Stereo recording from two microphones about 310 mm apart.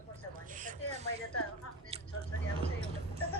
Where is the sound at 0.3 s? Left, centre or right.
Right.